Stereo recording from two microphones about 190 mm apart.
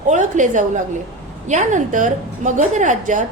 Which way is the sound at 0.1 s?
40° right (ahead or behind).